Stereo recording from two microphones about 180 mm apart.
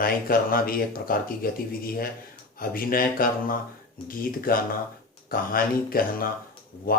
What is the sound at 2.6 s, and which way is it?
Speech, 55° left (ahead or behind).